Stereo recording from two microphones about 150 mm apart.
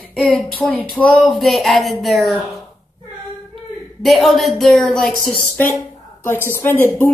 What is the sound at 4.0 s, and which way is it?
Speech, centre (ahead or behind).